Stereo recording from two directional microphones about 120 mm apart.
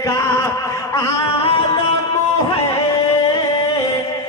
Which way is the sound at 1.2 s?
50° left (ahead or behind).